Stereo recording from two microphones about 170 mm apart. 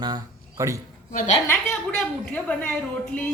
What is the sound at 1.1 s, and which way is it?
Speech, 50° left (ahead or behind).